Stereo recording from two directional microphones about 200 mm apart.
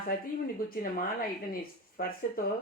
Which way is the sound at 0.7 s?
45° left (ahead or behind).